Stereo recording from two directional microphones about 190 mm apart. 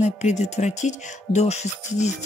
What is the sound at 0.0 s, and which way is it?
Speech, 40° left (ahead or behind).